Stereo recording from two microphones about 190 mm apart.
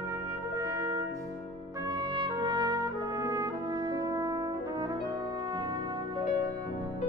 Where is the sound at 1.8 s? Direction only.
25° right (ahead or behind).